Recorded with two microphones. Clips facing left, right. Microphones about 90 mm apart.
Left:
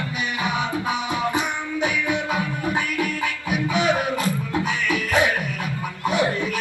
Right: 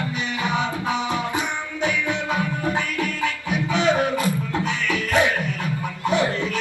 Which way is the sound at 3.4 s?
15° left (ahead or behind).